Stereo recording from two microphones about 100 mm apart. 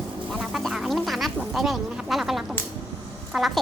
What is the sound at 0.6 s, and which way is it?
Quack, centre (ahead or behind).